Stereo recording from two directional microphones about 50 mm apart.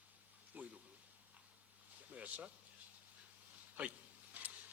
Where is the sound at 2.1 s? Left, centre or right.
Right.